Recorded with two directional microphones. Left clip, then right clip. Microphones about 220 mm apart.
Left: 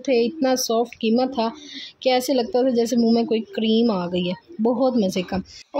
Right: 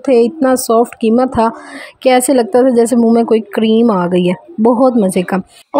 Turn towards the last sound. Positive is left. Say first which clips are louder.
# right 11 dB
turn(degrees=-25)  # may be behind; listen again after turning